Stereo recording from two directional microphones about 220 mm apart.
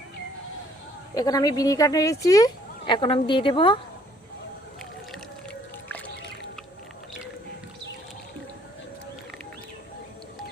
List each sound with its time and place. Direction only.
1.1 s speech: 15° left (ahead or behind)